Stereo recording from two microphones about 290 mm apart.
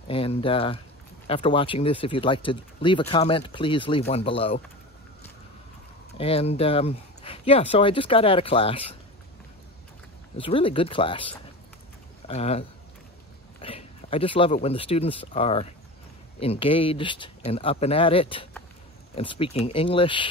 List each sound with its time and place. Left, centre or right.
0.1 s speech: centre
6.1 s speech: centre
10.3 s speech: centre